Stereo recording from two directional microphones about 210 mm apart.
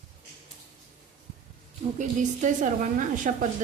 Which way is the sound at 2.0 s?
35° right (ahead or behind).